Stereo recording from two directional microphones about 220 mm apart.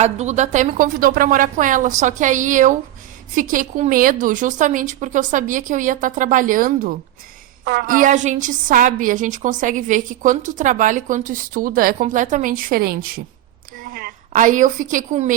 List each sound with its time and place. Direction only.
0.0 s a woman's voice: 30° right (ahead or behind)